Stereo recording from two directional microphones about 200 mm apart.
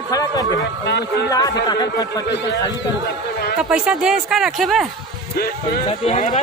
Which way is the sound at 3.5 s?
5° right (ahead or behind).